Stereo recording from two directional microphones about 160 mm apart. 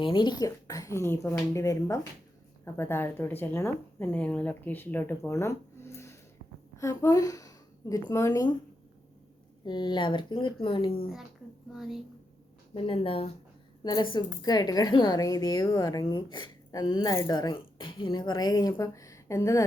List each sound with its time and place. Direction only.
0.0 s a woman's voice: 30° left (ahead or behind)
9.6 s a woman's voice: 30° left (ahead or behind)
11.7 s a woman's voice: centre (ahead or behind)
12.7 s a woman's voice: 35° left (ahead or behind); by 19.6 s 20° left (ahead or behind)